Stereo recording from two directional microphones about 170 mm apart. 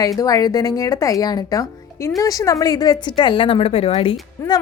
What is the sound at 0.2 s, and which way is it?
A woman's voice, 20° left (ahead or behind).